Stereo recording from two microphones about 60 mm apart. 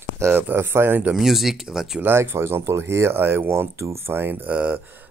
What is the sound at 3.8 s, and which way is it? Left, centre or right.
Speech, right.